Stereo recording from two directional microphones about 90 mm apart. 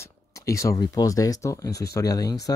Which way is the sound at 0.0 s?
35° left (ahead or behind).